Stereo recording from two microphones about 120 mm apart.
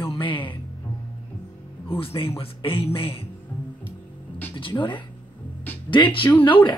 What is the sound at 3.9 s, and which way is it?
Music, 15° left (ahead or behind).